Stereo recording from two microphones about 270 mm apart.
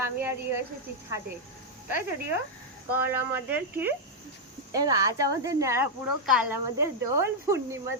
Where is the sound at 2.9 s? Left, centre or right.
Centre.